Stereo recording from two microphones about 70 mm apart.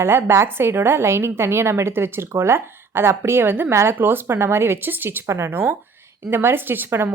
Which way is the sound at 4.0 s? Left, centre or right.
Right.